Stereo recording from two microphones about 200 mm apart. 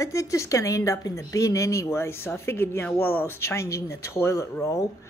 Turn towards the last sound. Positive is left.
turn(degrees=15)  # may be behind; listen again after turning